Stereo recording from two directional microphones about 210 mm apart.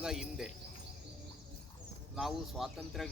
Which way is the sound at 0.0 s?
5° right (ahead or behind).